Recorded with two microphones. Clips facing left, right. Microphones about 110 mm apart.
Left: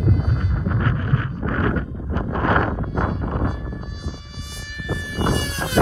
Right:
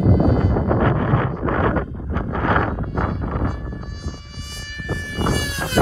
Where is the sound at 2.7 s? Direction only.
Centre (ahead or behind).